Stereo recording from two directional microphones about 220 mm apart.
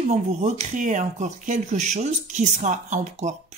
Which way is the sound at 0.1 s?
30° right (ahead or behind).